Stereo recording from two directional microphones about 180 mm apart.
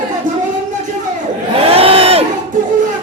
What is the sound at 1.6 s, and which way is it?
Crowd, 35° right (ahead or behind).